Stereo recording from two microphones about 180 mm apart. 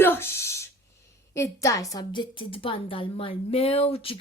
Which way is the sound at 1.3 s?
15° left (ahead or behind).